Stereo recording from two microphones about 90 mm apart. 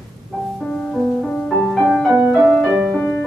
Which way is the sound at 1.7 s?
5° left (ahead or behind).